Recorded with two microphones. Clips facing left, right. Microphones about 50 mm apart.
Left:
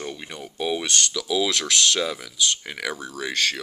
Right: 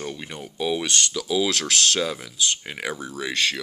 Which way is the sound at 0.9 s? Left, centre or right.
Right.